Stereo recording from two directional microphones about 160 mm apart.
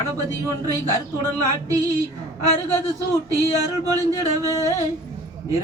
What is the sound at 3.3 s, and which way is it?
Speech, 20° right (ahead or behind).